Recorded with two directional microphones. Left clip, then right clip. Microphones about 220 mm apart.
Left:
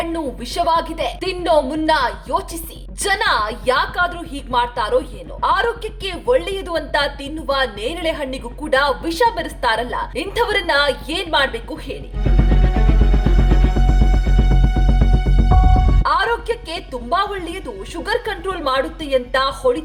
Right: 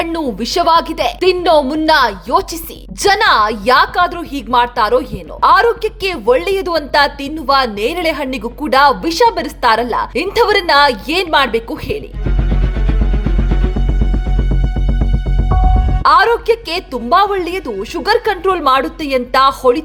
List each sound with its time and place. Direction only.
0.0 s a woman's voice: 40° right (ahead or behind)
16.0 s a woman's voice: 40° right (ahead or behind)